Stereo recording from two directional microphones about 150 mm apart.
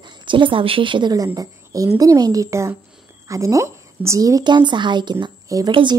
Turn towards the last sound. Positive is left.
turn(degrees=-30)  # may be behind; listen again after turning